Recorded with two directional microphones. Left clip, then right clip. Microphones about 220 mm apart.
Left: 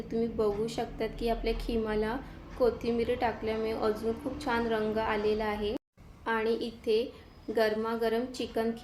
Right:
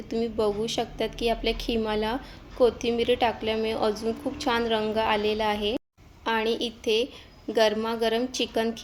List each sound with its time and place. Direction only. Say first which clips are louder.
0.1 s a woman's voice: right 4 dB; 40° right (ahead or behind)